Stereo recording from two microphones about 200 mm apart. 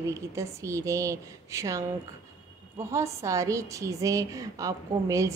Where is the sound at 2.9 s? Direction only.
15° right (ahead or behind).